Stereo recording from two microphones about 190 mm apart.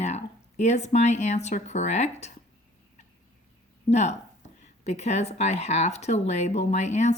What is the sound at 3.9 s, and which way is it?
Speech, 35° left (ahead or behind).